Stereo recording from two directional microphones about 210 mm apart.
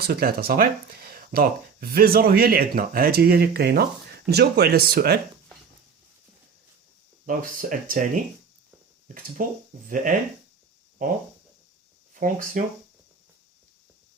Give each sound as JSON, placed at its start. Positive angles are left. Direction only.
{"t": 0.0, "sound": "speech", "side_deg": -45}
{"t": 7.3, "sound": "speech", "side_deg": -40}
{"t": 9.4, "sound": "speech", "side_deg": -40}